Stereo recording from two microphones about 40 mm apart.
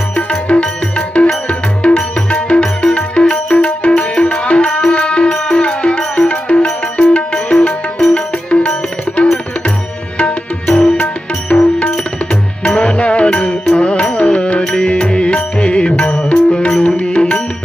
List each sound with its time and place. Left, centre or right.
0.2 s music: left
10.2 s music: left
12.3 s music: left